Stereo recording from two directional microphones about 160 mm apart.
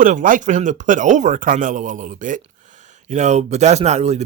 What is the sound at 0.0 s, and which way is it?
Speech, 55° right (ahead or behind).